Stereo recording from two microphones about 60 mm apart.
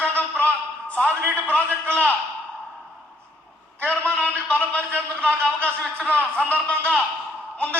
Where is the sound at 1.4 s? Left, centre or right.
Left.